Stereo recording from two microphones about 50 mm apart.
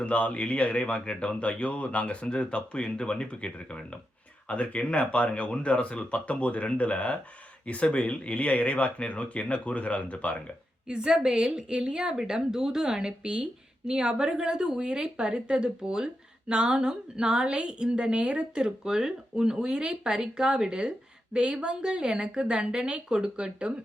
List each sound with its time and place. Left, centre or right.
0.0 s speech: left
10.8 s a woman's voice: centre